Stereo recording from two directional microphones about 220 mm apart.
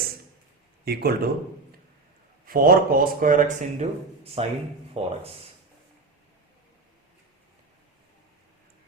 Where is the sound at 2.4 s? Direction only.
40° right (ahead or behind).